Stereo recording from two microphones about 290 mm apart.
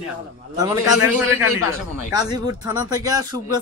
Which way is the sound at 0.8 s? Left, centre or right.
Left.